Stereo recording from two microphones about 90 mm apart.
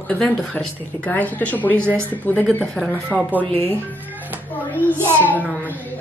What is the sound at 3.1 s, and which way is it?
Speech, 10° right (ahead or behind).